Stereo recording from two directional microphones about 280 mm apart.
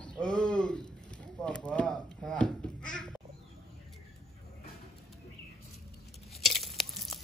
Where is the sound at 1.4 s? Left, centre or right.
Centre.